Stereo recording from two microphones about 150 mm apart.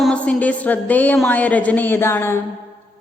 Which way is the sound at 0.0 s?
5° left (ahead or behind).